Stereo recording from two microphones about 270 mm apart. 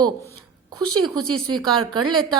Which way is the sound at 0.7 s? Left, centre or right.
Centre.